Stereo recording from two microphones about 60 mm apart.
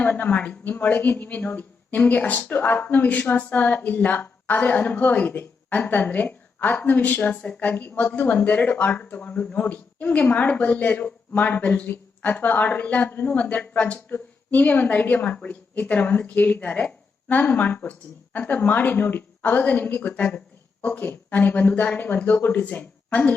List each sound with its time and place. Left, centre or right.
0.0 s speech: left